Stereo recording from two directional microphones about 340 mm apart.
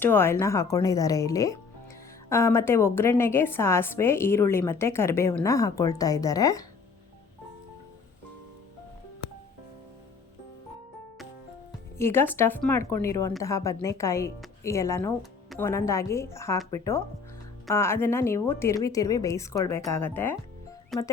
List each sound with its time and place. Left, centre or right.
0.0 s a woman's voice: centre
11.9 s a woman's voice: centre